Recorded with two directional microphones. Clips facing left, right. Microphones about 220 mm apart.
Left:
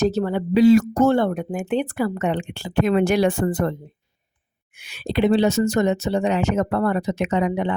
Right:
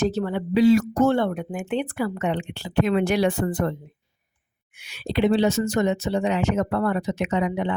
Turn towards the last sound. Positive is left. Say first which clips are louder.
# left 2 dB
turn(degrees=45)  # may be behind; listen again after turning